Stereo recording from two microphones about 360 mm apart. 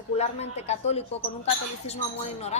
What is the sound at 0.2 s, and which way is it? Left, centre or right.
A woman's voice, centre.